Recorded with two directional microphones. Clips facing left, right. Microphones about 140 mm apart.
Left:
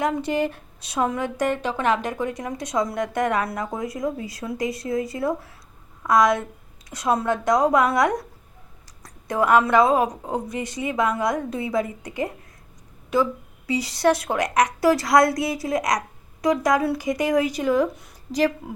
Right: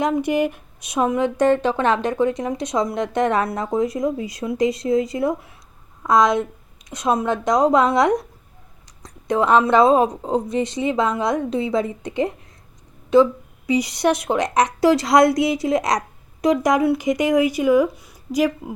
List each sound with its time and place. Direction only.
0.0 s speech: 15° right (ahead or behind)